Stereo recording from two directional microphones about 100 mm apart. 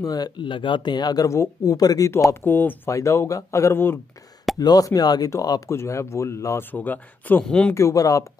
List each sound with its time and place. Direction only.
0.0 s speech: 40° left (ahead or behind)
2.4 s speech: 20° left (ahead or behind)
2.9 s speech: 30° left (ahead or behind)
4.6 s speech: 40° left (ahead or behind); by 7.7 s 10° left (ahead or behind)
7.7 s speech: 30° left (ahead or behind)